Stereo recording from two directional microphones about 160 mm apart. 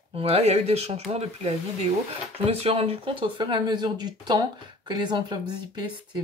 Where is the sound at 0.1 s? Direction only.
40° right (ahead or behind).